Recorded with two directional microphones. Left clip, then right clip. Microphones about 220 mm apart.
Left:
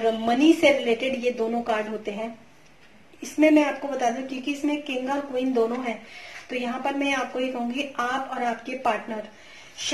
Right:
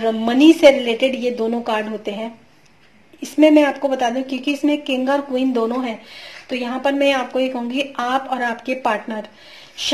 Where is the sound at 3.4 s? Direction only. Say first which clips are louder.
Right 7 dB; 45° right (ahead or behind).